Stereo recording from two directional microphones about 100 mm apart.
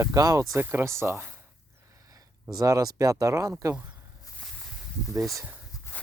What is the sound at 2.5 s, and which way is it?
Speech, 35° right (ahead or behind).